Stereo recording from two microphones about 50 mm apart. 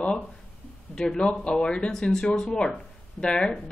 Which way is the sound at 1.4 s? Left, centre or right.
Centre.